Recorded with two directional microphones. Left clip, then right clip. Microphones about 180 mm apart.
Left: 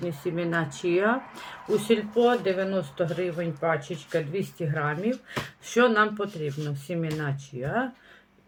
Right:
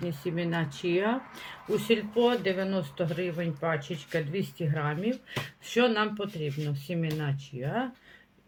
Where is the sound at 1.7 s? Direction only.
15° right (ahead or behind).